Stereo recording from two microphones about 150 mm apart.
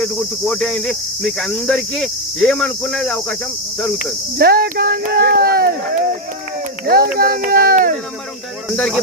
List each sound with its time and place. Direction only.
0.0 s speech: 5° left (ahead or behind)
4.4 s speech: 90° right
6.8 s speech: 90° right; by 7.9 s 70° right (ahead or behind)
8.7 s speech: 5° left (ahead or behind)